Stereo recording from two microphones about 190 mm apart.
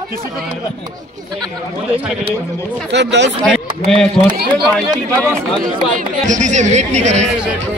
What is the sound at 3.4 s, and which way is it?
Speech, centre (ahead or behind).